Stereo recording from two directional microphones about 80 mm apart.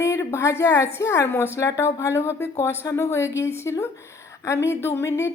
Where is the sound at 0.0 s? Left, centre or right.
Left.